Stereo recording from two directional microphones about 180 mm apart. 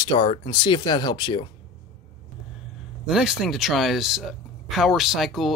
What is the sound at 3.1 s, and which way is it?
Speech, 5° right (ahead or behind).